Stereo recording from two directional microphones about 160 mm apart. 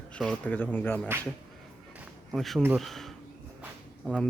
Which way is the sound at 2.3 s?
Centre (ahead or behind).